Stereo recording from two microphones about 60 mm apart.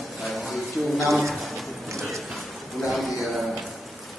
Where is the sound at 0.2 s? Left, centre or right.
Centre.